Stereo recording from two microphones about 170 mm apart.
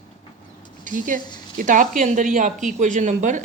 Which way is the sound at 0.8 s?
50° right (ahead or behind).